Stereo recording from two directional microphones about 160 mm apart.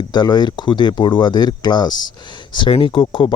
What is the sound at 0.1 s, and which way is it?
Speech, 25° left (ahead or behind).